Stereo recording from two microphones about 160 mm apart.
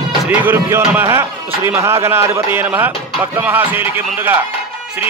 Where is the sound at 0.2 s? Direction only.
10° right (ahead or behind).